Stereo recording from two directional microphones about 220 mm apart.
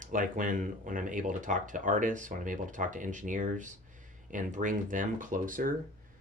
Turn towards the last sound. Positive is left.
turn(degrees=-40)  # may be behind; listen again after turning